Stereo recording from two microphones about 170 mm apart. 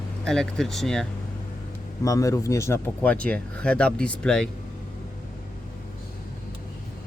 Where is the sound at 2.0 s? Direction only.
20° left (ahead or behind).